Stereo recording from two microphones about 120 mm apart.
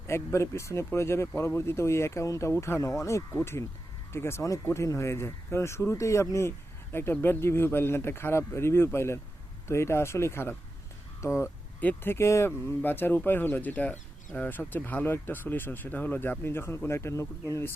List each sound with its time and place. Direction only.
0.1 s speech: 20° left (ahead or behind)